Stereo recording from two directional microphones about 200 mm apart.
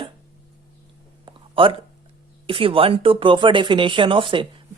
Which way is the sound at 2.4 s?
25° right (ahead or behind).